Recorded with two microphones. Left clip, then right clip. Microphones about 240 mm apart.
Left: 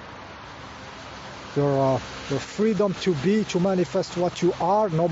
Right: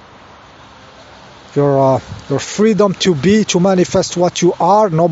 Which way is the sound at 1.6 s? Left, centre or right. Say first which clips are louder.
Right 10 dB; right.